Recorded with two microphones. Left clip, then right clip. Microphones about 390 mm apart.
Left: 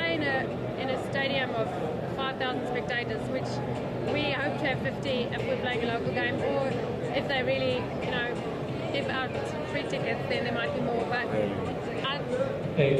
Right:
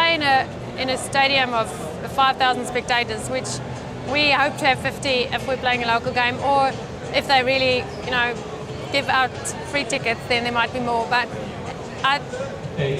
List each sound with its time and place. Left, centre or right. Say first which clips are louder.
0.0 s vehicle: right 11 dB; right
2.1 s speech: right 16 dB; right